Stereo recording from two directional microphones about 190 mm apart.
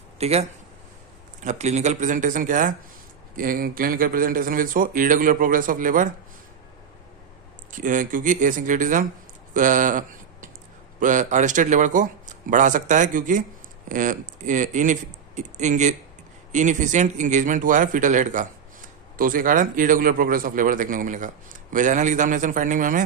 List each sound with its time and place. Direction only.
0.2 s a man's voice: 35° right (ahead or behind)
7.7 s a man's voice: 45° right (ahead or behind)
11.0 s a man's voice: 40° right (ahead or behind)